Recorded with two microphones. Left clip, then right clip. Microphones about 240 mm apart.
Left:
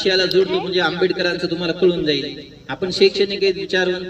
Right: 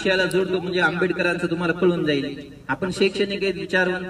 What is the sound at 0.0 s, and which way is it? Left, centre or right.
A man's voice, centre.